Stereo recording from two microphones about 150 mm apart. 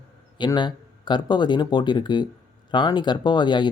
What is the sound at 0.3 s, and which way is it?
Speech, 30° left (ahead or behind).